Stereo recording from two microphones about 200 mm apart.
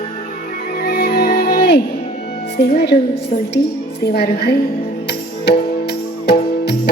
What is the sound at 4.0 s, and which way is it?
A woman's voice, 55° left (ahead or behind).